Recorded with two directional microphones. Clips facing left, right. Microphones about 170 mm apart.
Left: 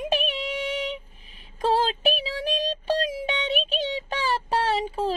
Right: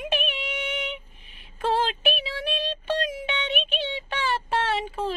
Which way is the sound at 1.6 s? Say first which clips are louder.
Left 2 dB; 35° left (ahead or behind).